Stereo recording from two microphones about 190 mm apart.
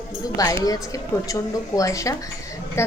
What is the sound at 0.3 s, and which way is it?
A woman's voice, 15° left (ahead or behind).